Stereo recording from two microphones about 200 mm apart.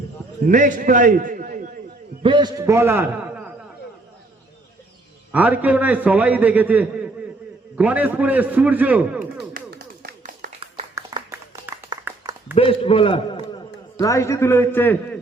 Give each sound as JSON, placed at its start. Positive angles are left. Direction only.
{"t": 0.4, "sound": "a man's voice", "side_deg": -40}
{"t": 2.2, "sound": "a man's voice", "side_deg": -20}
{"t": 5.3, "sound": "a man's voice", "side_deg": -10}
{"t": 9.5, "sound": "clapping", "side_deg": -45}
{"t": 10.9, "sound": "a sound", "side_deg": -15}
{"t": 12.5, "sound": "a man's voice", "side_deg": 25}
{"t": 14.0, "sound": "a man's voice", "side_deg": 15}